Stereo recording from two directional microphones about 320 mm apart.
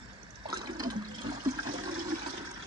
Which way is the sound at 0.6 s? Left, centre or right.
Centre.